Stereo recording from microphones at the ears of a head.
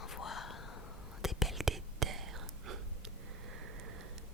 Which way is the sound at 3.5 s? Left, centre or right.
Right.